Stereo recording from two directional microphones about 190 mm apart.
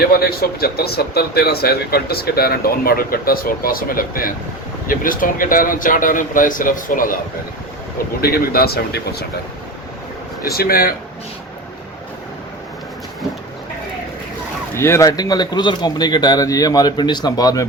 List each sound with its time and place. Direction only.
0.1 s speech: 55° left (ahead or behind)
8.2 s speech: 55° left (ahead or behind)
10.5 s speech: 50° left (ahead or behind)
14.8 s speech: 15° left (ahead or behind)